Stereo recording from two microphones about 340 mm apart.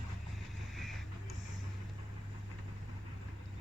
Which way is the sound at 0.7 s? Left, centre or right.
Centre.